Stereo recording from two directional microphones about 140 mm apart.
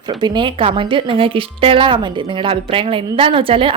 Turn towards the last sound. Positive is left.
turn(degrees=-40)  # may be behind; listen again after turning